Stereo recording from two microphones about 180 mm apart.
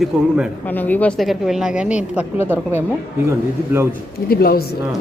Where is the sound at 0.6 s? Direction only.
10° left (ahead or behind); by 3.8 s 15° right (ahead or behind).